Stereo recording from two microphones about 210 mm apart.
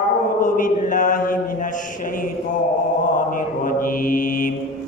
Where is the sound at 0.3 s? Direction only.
40° left (ahead or behind).